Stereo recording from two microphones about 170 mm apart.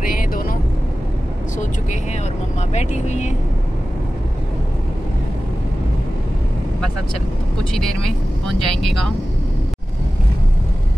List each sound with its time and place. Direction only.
0.0 s vehicle: 55° left (ahead or behind)
2.7 s speech: 45° left (ahead or behind)
7.7 s speech: 5° left (ahead or behind)